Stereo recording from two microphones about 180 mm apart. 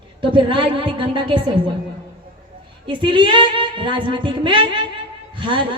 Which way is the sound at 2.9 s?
25° right (ahead or behind).